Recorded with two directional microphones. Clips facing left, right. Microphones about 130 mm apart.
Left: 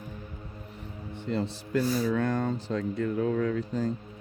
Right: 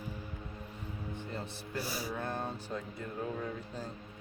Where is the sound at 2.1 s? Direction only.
90° left.